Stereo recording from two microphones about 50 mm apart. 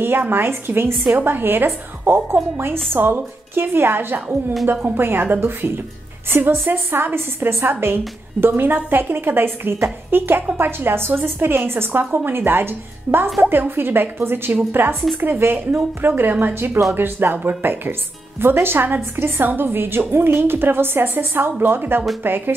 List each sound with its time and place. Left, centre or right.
0.0 s a woman's voice: right